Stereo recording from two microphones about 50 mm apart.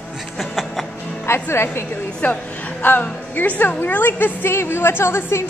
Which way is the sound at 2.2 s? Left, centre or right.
Left.